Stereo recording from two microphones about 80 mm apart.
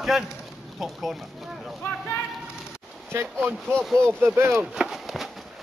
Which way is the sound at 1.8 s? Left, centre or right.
Left.